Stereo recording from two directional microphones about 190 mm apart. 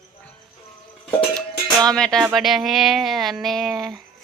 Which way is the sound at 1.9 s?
5° left (ahead or behind).